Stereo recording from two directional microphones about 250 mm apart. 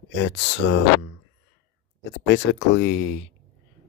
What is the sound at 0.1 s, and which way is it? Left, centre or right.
Speech, left.